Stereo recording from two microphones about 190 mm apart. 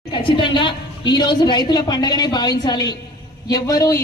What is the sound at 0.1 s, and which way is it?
A man's voice, 25° left (ahead or behind).